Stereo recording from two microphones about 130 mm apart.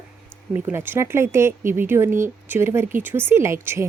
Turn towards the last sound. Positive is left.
turn(degrees=-20)  # may be behind; listen again after turning